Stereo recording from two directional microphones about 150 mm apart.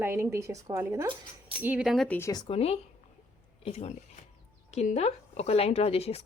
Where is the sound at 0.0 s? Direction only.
15° right (ahead or behind).